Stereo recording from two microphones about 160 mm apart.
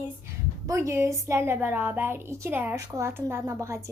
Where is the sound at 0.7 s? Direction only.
15° right (ahead or behind).